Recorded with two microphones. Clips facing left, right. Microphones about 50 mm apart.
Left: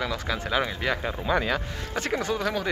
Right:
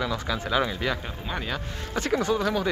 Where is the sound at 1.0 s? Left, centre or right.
Left.